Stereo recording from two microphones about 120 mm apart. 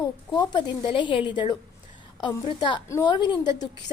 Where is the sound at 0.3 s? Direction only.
40° left (ahead or behind).